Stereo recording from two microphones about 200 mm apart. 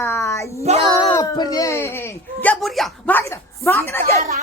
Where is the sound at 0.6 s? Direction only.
30° right (ahead or behind).